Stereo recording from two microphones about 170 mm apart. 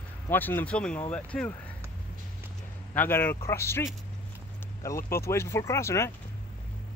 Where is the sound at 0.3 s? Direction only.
10° left (ahead or behind).